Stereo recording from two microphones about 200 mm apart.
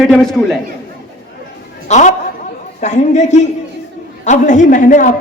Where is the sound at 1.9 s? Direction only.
35° left (ahead or behind).